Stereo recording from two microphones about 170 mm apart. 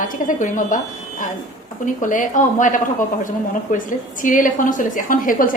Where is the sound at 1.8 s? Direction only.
50° left (ahead or behind).